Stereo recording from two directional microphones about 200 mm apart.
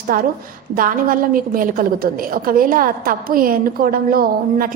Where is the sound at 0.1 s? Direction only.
45° right (ahead or behind).